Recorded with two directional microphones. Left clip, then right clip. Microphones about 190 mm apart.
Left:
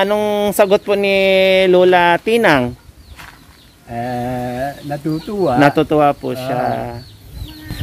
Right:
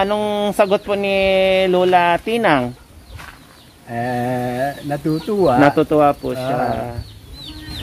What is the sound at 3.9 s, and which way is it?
Speech, centre (ahead or behind).